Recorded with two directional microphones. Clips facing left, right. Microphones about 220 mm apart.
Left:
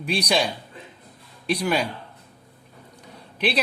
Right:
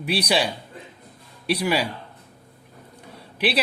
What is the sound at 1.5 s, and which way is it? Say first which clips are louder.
Speech: right 1 dB; 5° right (ahead or behind).